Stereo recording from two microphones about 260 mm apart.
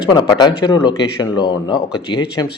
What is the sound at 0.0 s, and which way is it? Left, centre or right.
Speech, centre.